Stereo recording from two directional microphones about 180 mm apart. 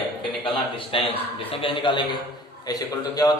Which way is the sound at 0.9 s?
30° left (ahead or behind).